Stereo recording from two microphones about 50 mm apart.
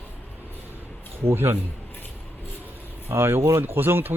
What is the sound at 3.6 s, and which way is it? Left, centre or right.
Speech, right.